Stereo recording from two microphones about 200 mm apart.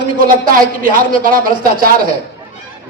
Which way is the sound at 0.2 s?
45° right (ahead or behind).